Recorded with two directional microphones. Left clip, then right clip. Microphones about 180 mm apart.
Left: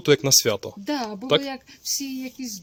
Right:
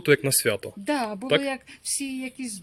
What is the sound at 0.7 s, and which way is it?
Speech, 5° right (ahead or behind).